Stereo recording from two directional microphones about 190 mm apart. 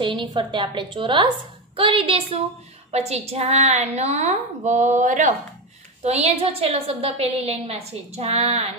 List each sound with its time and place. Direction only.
0.0 s a woman's voice: 25° right (ahead or behind)